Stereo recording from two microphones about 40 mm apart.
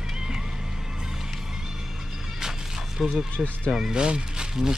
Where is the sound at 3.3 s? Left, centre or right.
Left.